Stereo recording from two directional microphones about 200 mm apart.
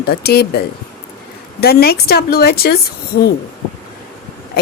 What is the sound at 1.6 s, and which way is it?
A woman's voice, 50° left (ahead or behind).